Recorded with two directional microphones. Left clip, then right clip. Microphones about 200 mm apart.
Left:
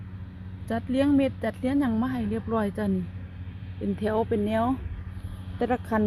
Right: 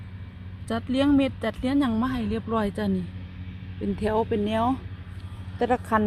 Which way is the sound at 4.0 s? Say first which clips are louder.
Right 1 dB; centre (ahead or behind).